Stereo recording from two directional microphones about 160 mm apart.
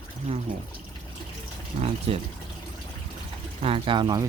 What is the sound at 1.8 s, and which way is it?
Speech, 40° right (ahead or behind).